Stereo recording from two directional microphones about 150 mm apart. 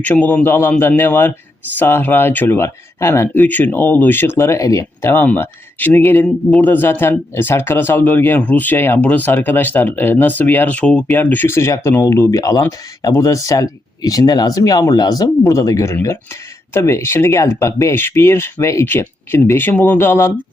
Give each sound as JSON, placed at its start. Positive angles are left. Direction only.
{"t": 0.0, "sound": "speech", "side_deg": 10}